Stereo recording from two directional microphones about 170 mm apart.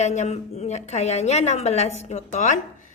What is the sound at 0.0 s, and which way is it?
A woman's voice, 40° left (ahead or behind).